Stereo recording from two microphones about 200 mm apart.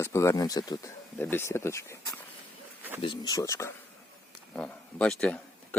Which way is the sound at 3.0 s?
20° left (ahead or behind).